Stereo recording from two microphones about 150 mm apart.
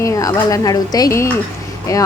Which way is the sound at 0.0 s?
25° left (ahead or behind).